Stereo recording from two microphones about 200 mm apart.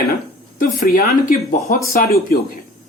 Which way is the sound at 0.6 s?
45° left (ahead or behind).